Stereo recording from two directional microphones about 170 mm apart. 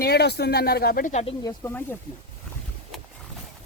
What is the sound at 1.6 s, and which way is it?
Speech, 15° left (ahead or behind).